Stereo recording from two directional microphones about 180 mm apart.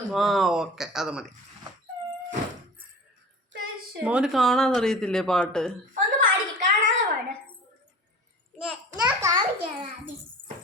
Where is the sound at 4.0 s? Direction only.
5° right (ahead or behind).